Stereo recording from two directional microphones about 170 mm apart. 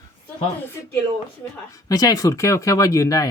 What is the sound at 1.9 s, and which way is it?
Speech, 20° left (ahead or behind).